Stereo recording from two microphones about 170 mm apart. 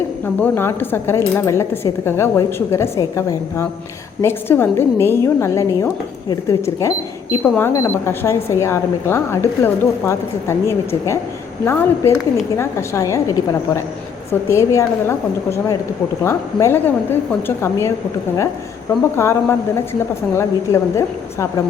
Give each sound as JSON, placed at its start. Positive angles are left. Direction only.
{"t": 0.4, "sound": "speech", "side_deg": 15}
{"t": 14.4, "sound": "speech", "side_deg": 15}
{"t": 19.1, "sound": "speech", "side_deg": 15}